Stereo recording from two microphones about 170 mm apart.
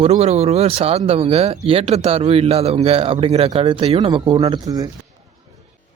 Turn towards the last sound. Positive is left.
turn(degrees=-20)  # may be behind; listen again after turning